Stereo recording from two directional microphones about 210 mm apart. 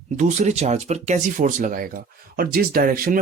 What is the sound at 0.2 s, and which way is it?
Speech, 35° right (ahead or behind).